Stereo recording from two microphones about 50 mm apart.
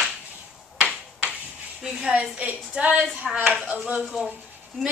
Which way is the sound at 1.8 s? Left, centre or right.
Centre.